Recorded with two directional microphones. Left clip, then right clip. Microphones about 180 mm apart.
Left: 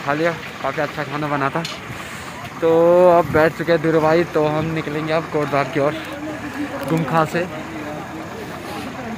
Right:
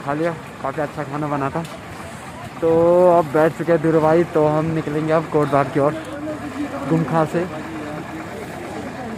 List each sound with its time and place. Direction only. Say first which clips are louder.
0.1 s speech: left 2 dB; 10° right (ahead or behind)
2.6 s speech: left 1 dB; 5° right (ahead or behind)
4.4 s speech: right 1 dB; 30° right (ahead or behind)